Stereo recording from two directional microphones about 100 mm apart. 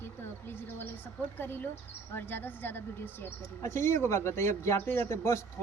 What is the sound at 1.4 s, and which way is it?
A man's voice, 20° left (ahead or behind).